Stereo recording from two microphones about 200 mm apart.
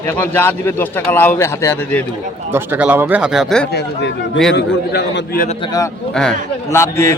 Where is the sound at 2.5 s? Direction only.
10° right (ahead or behind).